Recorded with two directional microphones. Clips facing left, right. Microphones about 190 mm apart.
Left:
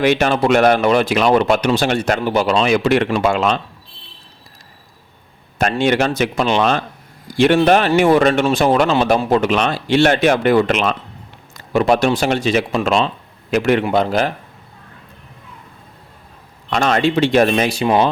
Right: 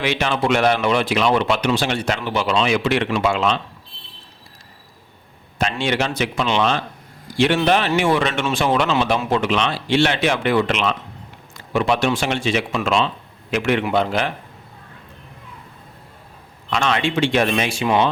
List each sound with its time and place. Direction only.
0.0 s speech: 45° left (ahead or behind)
5.5 s speech: 45° left (ahead or behind)
16.6 s speech: 45° left (ahead or behind)